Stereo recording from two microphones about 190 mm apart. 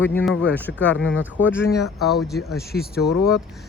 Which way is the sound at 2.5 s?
55° left (ahead or behind).